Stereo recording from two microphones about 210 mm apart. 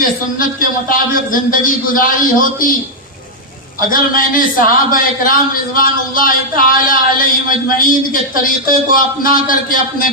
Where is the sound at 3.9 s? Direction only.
40° left (ahead or behind).